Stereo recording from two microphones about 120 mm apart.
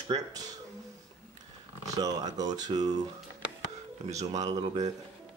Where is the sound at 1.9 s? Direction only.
30° right (ahead or behind).